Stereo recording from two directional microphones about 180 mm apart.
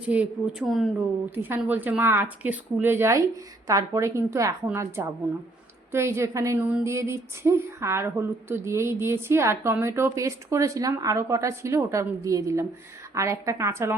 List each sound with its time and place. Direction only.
0.1 s speech: 5° right (ahead or behind)